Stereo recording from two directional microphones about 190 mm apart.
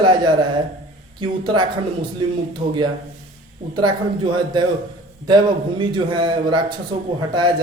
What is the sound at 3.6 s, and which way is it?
Speech, 35° right (ahead or behind).